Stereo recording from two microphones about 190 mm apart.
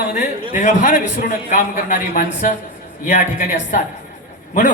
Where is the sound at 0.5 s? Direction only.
40° left (ahead or behind).